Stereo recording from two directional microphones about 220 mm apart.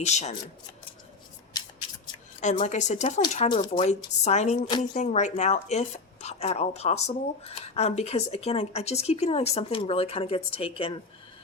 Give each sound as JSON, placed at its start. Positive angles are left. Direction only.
{"t": 0.0, "sound": "speech", "side_deg": 30}
{"t": 2.4, "sound": "a woman's voice", "side_deg": 35}